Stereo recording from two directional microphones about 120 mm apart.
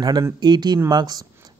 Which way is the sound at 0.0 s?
35° right (ahead or behind).